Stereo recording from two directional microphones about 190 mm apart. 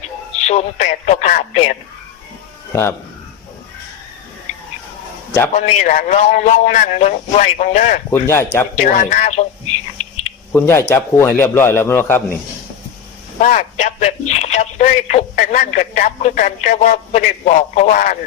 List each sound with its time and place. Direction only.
0.4 s speech: 35° left (ahead or behind)
5.5 s speech: 40° left (ahead or behind)
8.1 s a man's voice: 15° left (ahead or behind)
8.7 s speech: 40° left (ahead or behind)
10.5 s a man's voice: 10° left (ahead or behind)
13.4 s speech: 40° left (ahead or behind)